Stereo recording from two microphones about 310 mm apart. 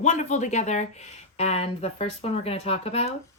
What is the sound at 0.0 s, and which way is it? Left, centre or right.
Speech, left.